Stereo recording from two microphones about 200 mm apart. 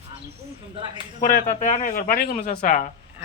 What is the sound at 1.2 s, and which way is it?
Speech, 40° left (ahead or behind).